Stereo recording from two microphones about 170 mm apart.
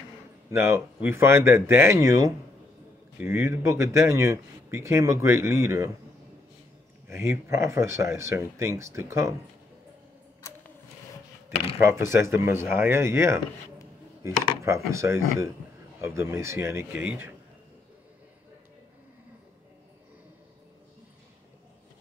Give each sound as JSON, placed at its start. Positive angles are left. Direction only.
{"t": 0.5, "sound": "speech", "side_deg": -15}
{"t": 7.1, "sound": "speech", "side_deg": -15}
{"t": 12.1, "sound": "speech", "side_deg": -15}